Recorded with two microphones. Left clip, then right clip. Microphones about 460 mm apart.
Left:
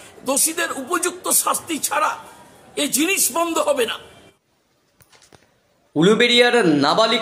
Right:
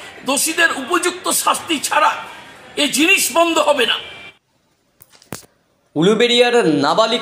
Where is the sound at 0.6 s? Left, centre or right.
Left.